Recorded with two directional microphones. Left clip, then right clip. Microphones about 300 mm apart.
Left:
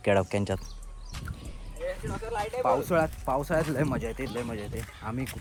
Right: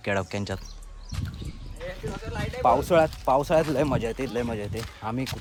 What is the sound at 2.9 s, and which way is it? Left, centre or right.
Speech, centre.